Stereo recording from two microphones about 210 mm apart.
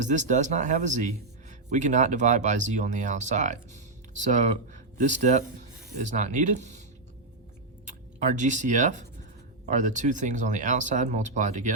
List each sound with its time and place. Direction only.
0.0 s speech: 35° right (ahead or behind)
7.9 s speech: 35° right (ahead or behind)